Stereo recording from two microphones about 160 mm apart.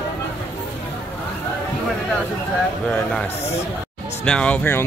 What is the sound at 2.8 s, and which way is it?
Speech, 5° left (ahead or behind).